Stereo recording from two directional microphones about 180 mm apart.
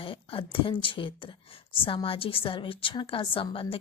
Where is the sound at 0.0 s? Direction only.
30° left (ahead or behind).